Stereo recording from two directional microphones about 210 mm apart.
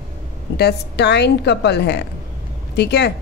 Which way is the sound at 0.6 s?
55° left (ahead or behind).